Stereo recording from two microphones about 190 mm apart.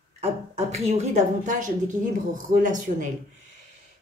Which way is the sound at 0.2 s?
35° right (ahead or behind).